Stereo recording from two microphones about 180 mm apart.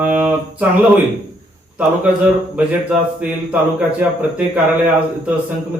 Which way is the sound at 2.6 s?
5° right (ahead or behind).